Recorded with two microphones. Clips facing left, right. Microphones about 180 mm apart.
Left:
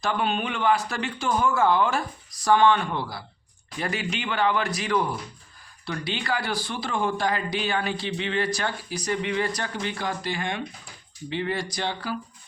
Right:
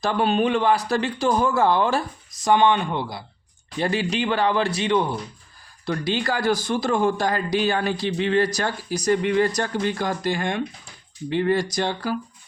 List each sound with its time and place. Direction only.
0.0 s speech: 35° right (ahead or behind)
2.4 s speech: 20° right (ahead or behind)
3.8 s speech: 30° right (ahead or behind)
5.8 s a man's voice: 45° right (ahead or behind)